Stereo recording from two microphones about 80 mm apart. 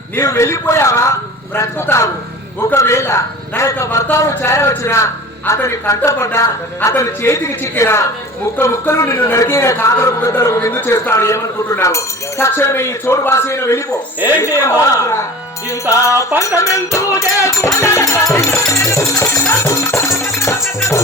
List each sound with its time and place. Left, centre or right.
0.2 s speech: left